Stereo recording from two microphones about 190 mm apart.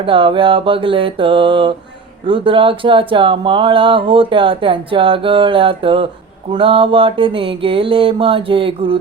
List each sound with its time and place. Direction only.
0.0 s speech: 25° right (ahead or behind)